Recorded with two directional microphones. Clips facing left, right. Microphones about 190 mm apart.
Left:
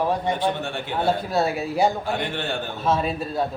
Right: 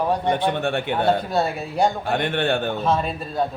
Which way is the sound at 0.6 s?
60° right (ahead or behind).